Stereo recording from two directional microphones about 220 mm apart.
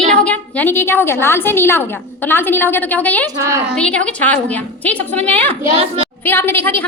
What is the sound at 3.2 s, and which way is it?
Speech, 15° right (ahead or behind).